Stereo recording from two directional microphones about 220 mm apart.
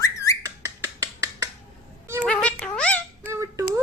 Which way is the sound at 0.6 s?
15° right (ahead or behind).